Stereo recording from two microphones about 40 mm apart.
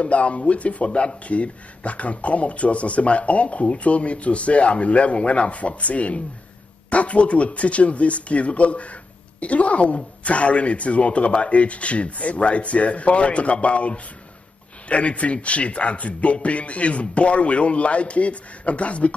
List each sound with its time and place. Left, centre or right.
0.0 s speech: left